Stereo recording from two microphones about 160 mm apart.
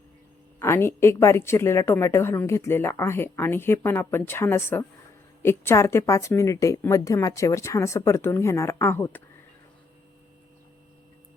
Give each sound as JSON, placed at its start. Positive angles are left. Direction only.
{"t": 0.6, "sound": "a woman's voice", "side_deg": 15}